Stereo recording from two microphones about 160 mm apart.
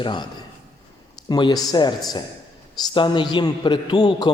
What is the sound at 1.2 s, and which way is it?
A man's voice, 25° left (ahead or behind).